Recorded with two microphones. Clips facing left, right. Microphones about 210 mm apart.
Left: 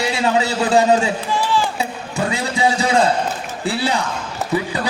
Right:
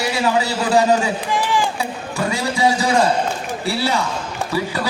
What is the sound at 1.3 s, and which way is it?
Speech, 15° right (ahead or behind).